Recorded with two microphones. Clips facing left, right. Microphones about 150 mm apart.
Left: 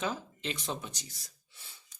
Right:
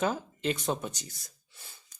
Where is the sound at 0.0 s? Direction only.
50° right (ahead or behind).